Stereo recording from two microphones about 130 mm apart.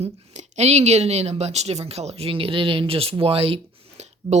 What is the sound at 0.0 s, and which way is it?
Speech, 60° right (ahead or behind).